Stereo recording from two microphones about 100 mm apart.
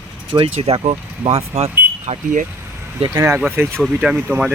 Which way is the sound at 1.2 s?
80° right.